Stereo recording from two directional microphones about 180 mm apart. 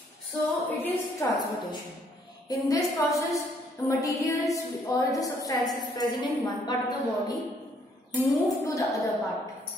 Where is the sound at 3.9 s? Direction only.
15° left (ahead or behind).